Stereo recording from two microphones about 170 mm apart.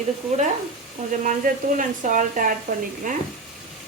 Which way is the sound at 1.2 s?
50° right (ahead or behind).